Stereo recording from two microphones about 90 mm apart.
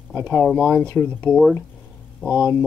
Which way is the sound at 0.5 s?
15° left (ahead or behind).